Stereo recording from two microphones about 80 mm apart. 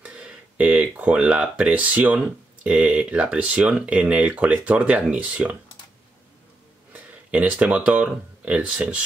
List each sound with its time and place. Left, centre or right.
0.0 s speech: centre
6.9 s speech: centre